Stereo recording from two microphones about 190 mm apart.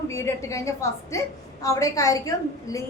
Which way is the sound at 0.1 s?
15° left (ahead or behind).